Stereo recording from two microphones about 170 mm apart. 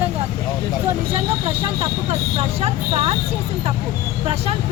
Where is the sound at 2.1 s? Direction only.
35° right (ahead or behind).